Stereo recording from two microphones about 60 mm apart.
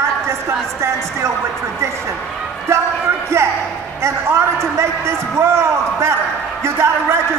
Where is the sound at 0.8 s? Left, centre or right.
Right.